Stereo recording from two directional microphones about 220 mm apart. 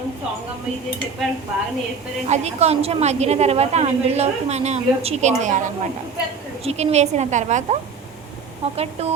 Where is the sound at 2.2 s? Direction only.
30° right (ahead or behind).